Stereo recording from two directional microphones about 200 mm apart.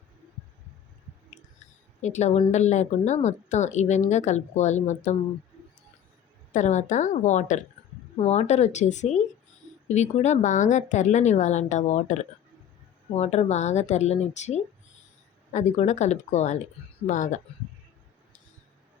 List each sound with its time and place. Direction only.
2.0 s speech: 35° left (ahead or behind)
6.5 s speech: 35° left (ahead or behind)